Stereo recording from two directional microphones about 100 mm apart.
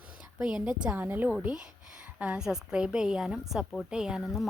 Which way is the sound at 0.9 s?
20° right (ahead or behind).